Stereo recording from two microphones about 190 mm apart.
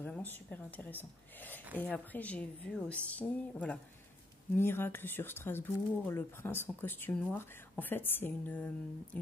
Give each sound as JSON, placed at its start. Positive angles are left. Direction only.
{"t": 0.0, "sound": "speech", "side_deg": 10}